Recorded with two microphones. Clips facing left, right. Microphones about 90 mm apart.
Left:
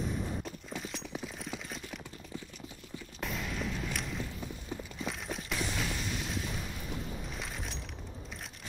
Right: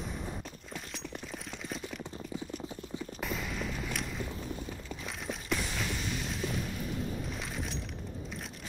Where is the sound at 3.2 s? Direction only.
Centre (ahead or behind).